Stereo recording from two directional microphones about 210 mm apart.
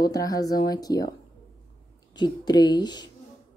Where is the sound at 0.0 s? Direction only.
15° left (ahead or behind).